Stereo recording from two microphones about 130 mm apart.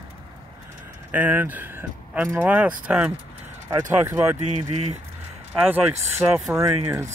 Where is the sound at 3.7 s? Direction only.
25° right (ahead or behind).